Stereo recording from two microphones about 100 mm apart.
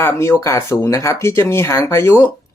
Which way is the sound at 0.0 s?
25° left (ahead or behind).